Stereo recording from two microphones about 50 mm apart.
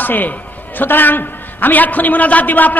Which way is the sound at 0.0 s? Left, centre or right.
Left.